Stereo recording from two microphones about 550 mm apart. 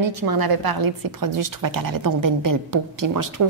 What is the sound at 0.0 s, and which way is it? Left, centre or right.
A woman's voice, right.